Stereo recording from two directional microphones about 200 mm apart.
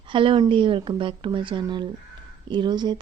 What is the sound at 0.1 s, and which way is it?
Speech, 25° right (ahead or behind).